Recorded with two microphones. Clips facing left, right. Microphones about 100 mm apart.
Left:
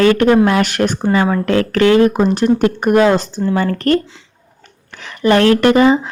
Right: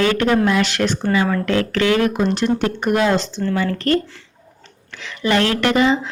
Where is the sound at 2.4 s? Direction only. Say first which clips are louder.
Left 5 dB; 45° left (ahead or behind).